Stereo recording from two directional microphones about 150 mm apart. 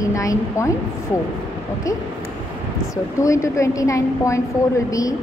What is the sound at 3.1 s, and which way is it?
A woman's voice, 20° left (ahead or behind).